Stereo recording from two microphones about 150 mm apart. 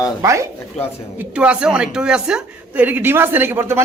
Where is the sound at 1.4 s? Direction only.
5° right (ahead or behind).